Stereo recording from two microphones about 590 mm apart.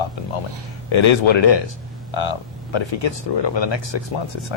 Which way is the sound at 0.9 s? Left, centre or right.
Left.